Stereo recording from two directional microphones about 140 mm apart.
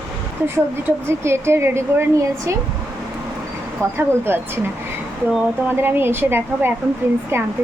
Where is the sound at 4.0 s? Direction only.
15° right (ahead or behind).